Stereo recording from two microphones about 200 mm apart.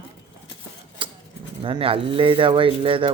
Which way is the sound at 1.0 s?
25° right (ahead or behind).